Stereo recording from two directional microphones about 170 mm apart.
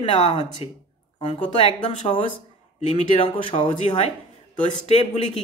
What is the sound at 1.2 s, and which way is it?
A man's voice, 40° left (ahead or behind).